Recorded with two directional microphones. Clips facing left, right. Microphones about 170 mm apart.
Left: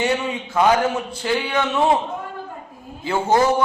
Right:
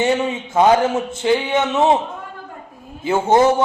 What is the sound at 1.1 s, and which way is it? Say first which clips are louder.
Speech: right 4 dB; 20° right (ahead or behind).